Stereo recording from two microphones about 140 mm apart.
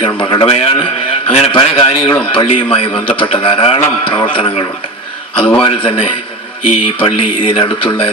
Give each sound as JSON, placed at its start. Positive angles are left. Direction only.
{"t": 0.2, "sound": "a man's voice", "side_deg": 35}
{"t": 5.5, "sound": "a man's voice", "side_deg": 40}